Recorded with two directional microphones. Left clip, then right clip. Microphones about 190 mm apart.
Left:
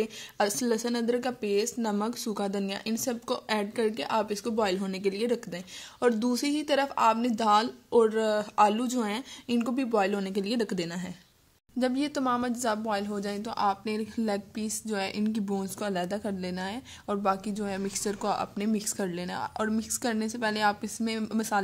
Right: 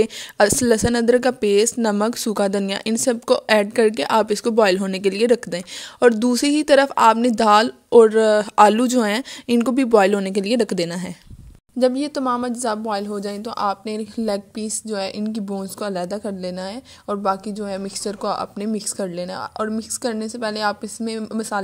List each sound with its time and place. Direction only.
0.0 s a woman's voice: 50° right (ahead or behind)
11.8 s a woman's voice: 25° right (ahead or behind)